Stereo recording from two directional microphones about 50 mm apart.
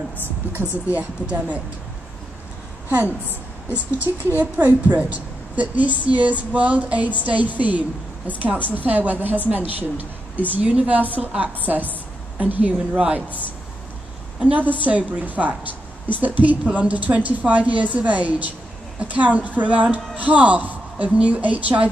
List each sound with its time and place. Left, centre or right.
0.2 s a woman's voice: right
0.9 s speech: right
3.7 s a woman's voice: right
10.6 s a woman's voice: right
14.4 s a woman's voice: right